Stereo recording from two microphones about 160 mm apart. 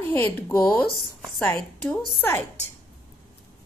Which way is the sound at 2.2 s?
10° left (ahead or behind).